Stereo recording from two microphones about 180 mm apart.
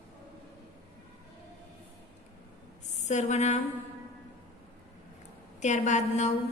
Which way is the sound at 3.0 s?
40° left (ahead or behind).